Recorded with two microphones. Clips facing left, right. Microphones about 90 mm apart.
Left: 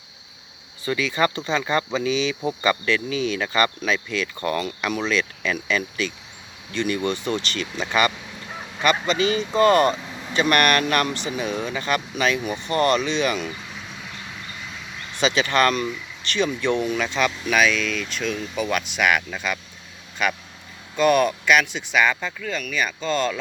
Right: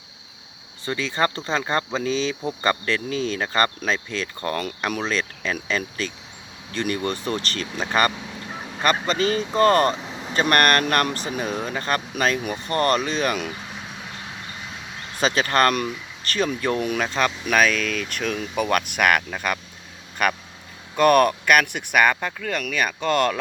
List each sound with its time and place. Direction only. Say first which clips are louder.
0.9 s speech: left 1 dB; 35° right (ahead or behind)
10.0 s vehicle: right 2 dB; 20° right (ahead or behind)
10.3 s speech: even; 40° right (ahead or behind)
15.1 s speech: even; 45° right (ahead or behind)
16.8 s speech: even; 55° right (ahead or behind)